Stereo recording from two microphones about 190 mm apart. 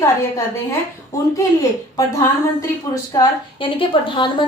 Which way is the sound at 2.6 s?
20° left (ahead or behind).